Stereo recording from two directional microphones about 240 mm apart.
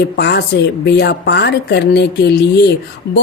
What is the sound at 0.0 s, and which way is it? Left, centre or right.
Speech, left.